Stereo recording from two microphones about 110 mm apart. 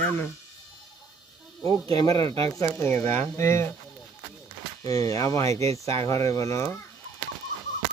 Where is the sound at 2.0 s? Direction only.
35° left (ahead or behind).